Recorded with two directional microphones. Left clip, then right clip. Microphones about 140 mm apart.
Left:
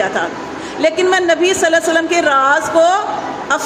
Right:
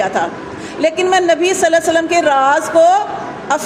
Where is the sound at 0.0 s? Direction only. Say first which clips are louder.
Right 1 dB; 35° right (ahead or behind).